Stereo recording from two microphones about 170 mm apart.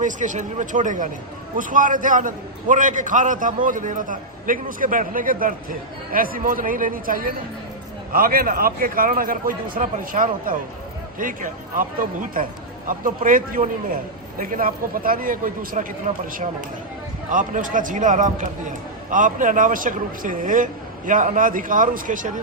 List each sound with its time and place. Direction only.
0.0 s a man's voice: 45° right (ahead or behind)
17.3 s a man's voice: 50° right (ahead or behind)